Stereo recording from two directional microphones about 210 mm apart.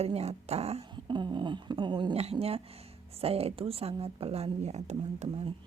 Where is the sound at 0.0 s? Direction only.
30° right (ahead or behind).